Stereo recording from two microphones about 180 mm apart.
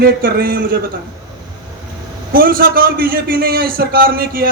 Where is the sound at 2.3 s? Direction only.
55° right (ahead or behind).